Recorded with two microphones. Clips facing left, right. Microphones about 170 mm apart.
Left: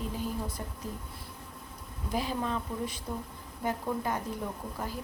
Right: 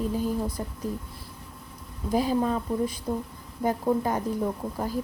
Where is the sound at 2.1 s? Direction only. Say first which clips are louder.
Right 8 dB; 40° right (ahead or behind).